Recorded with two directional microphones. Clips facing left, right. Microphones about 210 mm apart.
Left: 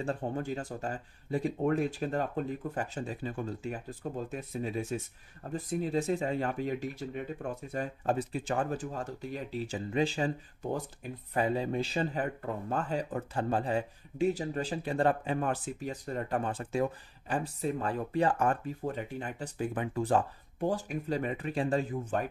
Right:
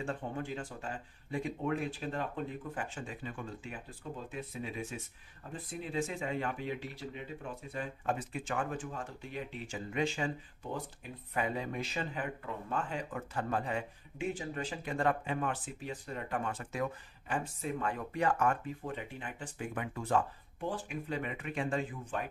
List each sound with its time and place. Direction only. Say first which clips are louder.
0.0 s speech: left 4 dB; 35° left (ahead or behind)